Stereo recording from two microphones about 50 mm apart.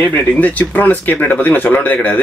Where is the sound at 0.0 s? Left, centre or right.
Left.